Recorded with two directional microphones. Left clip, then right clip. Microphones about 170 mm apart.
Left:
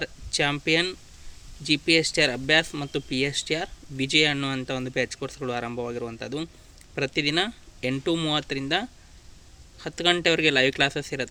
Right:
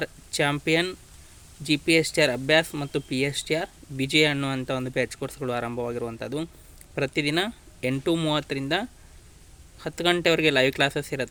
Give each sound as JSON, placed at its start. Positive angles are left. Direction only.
{"t": 0.0, "sound": "speech", "side_deg": -15}